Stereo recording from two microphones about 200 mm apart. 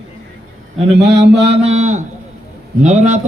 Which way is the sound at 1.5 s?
35° right (ahead or behind).